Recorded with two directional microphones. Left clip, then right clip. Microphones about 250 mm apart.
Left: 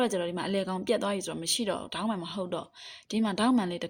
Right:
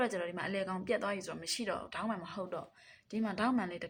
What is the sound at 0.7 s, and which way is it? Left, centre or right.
Speech, left.